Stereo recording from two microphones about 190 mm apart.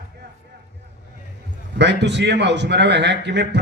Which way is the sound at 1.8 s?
65° right (ahead or behind).